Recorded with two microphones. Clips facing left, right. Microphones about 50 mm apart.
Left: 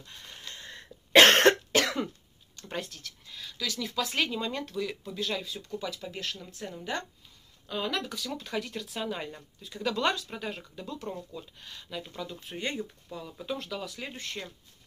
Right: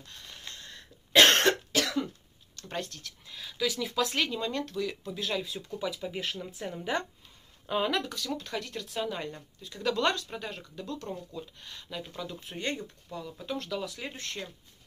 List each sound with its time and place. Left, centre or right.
0.6 s cough: left
2.7 s speech: centre
4.0 s a woman's voice: centre; by 7.9 s right
8.1 s speech: centre